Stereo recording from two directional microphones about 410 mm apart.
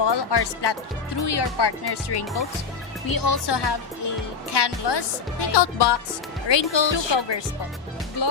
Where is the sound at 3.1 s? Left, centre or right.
Left.